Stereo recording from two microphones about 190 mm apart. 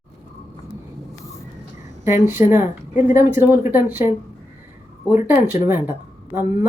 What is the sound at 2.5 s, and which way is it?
Speech, 10° right (ahead or behind).